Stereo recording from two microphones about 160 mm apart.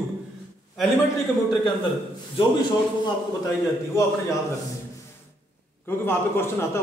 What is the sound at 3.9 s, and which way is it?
Speech, 20° left (ahead or behind).